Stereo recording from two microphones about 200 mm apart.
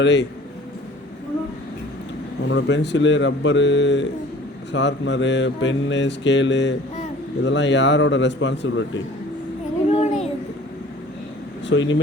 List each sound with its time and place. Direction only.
0.0 s mantra: 60° left (ahead or behind)
2.5 s mantra: 60° left (ahead or behind)
9.9 s a sound: 35° left (ahead or behind)
11.7 s speech: 70° left (ahead or behind)